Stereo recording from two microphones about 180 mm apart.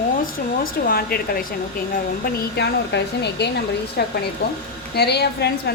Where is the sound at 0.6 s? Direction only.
55° left (ahead or behind).